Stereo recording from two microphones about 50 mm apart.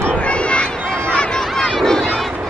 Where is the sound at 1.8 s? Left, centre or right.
Centre.